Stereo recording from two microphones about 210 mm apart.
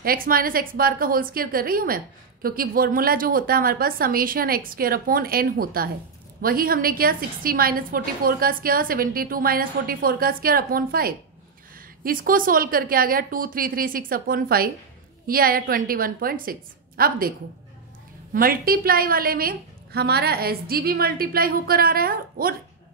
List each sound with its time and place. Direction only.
0.0 s a woman's voice: 45° right (ahead or behind)
18.3 s a woman's voice: 45° right (ahead or behind)